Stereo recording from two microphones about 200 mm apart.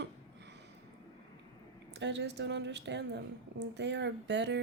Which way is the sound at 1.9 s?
60° right (ahead or behind).